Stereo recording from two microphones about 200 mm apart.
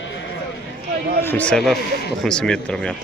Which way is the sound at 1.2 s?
10° left (ahead or behind).